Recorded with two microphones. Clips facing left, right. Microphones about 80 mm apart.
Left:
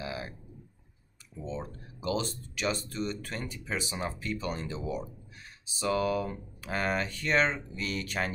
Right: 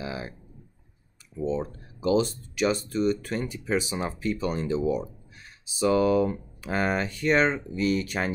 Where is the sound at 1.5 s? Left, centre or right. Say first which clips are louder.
Right 6 dB; centre.